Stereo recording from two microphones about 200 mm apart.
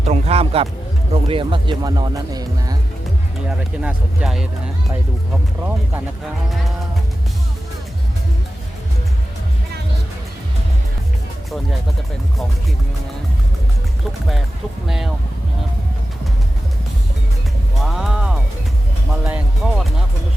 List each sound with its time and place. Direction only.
0.0 s a man's voice: 30° right (ahead or behind)
3.8 s speech: 5° right (ahead or behind)
14.8 s speech: centre (ahead or behind)
17.8 s music: centre (ahead or behind)
19.2 s speech: 5° right (ahead or behind)